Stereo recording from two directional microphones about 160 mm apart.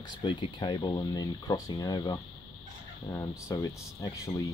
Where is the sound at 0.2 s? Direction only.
30° left (ahead or behind).